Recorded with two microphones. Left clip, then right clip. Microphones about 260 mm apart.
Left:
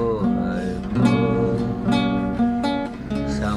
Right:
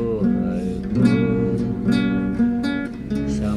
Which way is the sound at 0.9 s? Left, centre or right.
Right.